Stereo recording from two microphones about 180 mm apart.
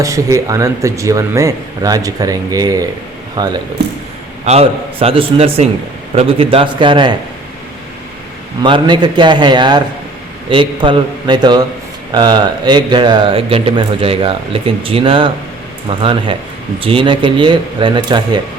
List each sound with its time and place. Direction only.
0.0 s speech: 15° right (ahead or behind)
4.4 s a man's voice: 35° right (ahead or behind)
8.6 s speech: 25° right (ahead or behind)